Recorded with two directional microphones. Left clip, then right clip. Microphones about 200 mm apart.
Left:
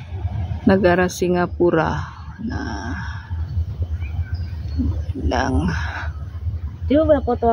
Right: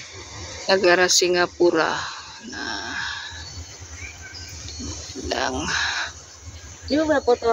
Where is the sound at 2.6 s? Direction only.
5° left (ahead or behind).